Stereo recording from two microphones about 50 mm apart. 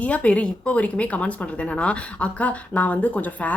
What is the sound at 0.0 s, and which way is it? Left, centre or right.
A woman's voice, left.